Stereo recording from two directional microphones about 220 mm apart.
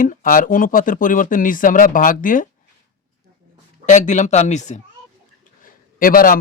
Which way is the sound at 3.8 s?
35° left (ahead or behind).